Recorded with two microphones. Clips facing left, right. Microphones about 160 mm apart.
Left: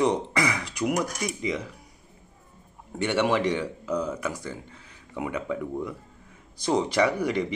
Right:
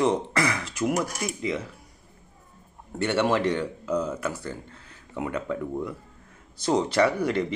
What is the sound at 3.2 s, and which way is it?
Speech, 15° left (ahead or behind).